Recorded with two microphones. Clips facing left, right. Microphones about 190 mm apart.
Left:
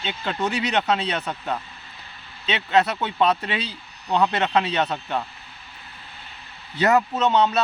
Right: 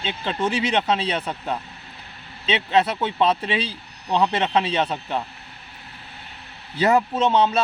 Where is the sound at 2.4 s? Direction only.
30° right (ahead or behind).